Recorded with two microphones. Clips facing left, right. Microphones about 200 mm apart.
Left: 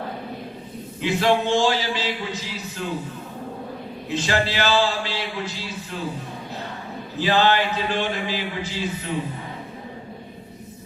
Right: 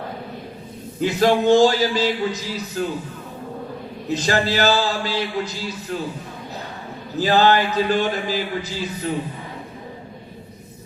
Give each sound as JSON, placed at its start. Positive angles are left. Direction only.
{"t": 1.0, "sound": "speech", "side_deg": -40}
{"t": 4.1, "sound": "speech", "side_deg": -40}
{"t": 7.2, "sound": "speech", "side_deg": -40}